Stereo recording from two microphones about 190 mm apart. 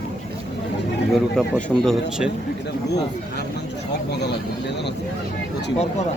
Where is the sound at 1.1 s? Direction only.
Centre (ahead or behind).